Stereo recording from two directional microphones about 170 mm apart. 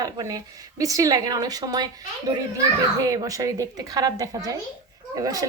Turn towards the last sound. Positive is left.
turn(degrees=-20)  # may be behind; listen again after turning